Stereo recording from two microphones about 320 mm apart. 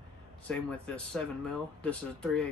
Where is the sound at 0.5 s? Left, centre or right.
Centre.